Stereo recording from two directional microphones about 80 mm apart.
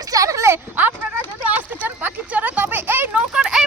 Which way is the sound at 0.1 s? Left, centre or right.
Right.